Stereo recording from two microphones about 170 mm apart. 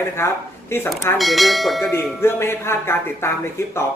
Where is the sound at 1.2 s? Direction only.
Centre (ahead or behind).